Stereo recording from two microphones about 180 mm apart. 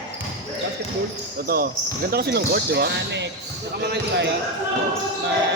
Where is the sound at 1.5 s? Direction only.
55° right (ahead or behind).